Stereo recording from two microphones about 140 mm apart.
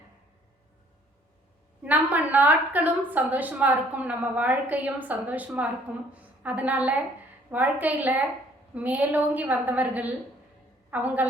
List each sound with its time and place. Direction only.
1.8 s a woman's voice: 10° right (ahead or behind)